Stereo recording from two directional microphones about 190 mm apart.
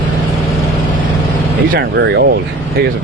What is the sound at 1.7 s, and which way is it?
Speech, 60° right (ahead or behind).